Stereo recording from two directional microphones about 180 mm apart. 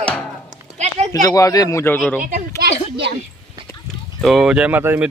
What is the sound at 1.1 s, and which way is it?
Speech, 20° left (ahead or behind).